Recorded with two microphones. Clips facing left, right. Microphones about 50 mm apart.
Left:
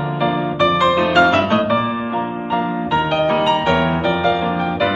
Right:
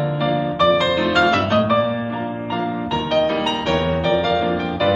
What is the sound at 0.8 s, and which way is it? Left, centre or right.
Music, left.